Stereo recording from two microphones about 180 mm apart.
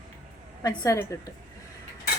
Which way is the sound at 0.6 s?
20° left (ahead or behind).